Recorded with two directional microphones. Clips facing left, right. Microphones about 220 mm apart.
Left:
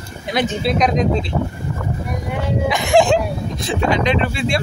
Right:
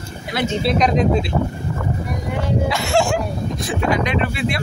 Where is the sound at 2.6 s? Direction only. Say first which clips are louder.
Left 6 dB; 15° left (ahead or behind).